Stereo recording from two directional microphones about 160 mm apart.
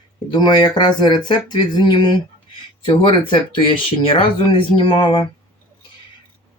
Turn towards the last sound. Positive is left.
turn(degrees=35)  # may be behind; listen again after turning